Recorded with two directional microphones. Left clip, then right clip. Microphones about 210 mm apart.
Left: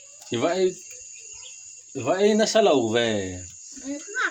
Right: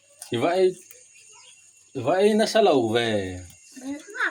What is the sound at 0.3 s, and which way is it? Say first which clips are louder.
Speech: right 2 dB; 10° left (ahead or behind).